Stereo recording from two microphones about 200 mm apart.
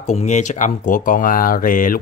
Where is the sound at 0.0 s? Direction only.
35° left (ahead or behind).